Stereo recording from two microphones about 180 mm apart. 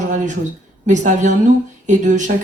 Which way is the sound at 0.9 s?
45° right (ahead or behind).